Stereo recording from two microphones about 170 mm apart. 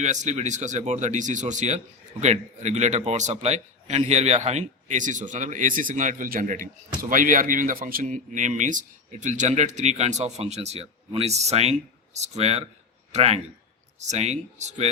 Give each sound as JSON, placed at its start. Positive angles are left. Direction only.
{"t": 0.0, "sound": "a man's voice", "side_deg": -45}